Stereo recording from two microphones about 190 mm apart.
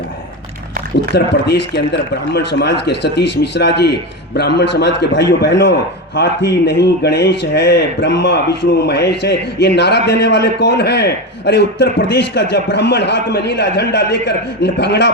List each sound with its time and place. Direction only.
1.1 s a man's voice: 60° left (ahead or behind)